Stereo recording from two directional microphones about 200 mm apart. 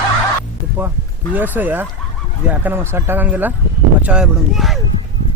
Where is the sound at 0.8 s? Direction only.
10° right (ahead or behind).